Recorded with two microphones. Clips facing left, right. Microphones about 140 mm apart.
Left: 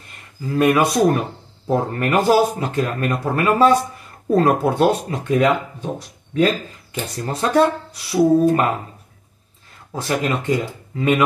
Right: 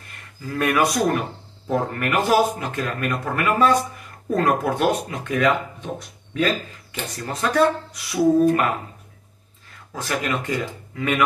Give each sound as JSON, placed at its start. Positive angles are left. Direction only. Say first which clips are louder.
{"t": 0.5, "sound": "speech", "louder": "left 4 dB", "side_deg": 25}
{"t": 9.9, "sound": "speech", "louder": "left 4 dB", "side_deg": 25}